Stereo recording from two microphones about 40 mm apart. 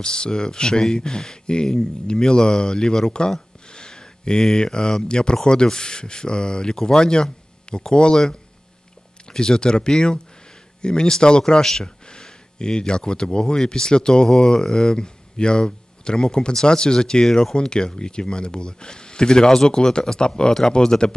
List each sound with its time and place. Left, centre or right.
0.0 s speech: centre
9.2 s speech: centre